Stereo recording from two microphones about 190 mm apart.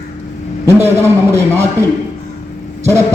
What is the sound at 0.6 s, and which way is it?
A man's voice, 15° right (ahead or behind).